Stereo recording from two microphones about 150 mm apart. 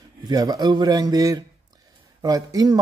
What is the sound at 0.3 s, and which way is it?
Speech, 25° right (ahead or behind).